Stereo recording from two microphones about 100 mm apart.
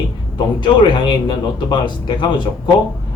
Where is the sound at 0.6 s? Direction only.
50° left (ahead or behind).